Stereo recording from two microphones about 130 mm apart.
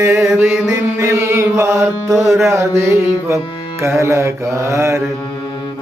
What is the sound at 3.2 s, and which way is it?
Music, 20° right (ahead or behind).